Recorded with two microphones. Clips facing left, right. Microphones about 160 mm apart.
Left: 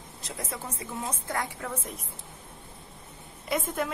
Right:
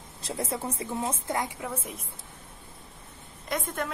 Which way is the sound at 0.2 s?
30° right (ahead or behind).